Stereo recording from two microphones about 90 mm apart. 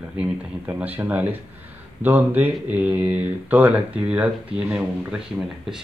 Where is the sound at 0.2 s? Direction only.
15° right (ahead or behind).